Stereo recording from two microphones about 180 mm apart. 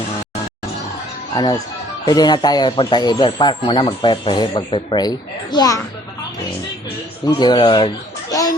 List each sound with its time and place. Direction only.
1.3 s speech: 20° left (ahead or behind)
7.3 s speech: 25° left (ahead or behind)